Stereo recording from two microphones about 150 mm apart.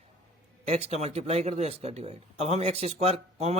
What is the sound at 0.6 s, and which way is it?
Speech, 45° right (ahead or behind).